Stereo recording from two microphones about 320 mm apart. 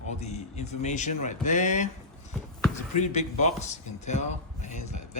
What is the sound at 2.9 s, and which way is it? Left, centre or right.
A man's voice, left.